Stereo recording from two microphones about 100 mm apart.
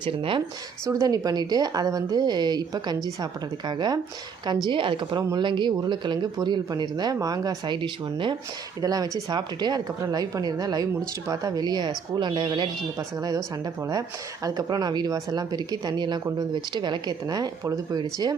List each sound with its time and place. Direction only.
0.0 s speech: 60° right (ahead or behind)
0.9 s a woman's voice: 35° right (ahead or behind); by 8.4 s 55° right (ahead or behind)
8.8 s a woman's voice: 40° right (ahead or behind)
13.0 s a woman's voice: 35° right (ahead or behind)
14.4 s speech: 40° right (ahead or behind)